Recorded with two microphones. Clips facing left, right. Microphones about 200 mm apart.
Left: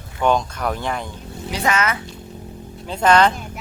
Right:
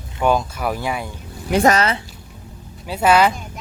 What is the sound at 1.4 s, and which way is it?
Speech, 55° right (ahead or behind).